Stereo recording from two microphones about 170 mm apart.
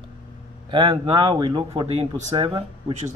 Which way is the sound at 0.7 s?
25° right (ahead or behind).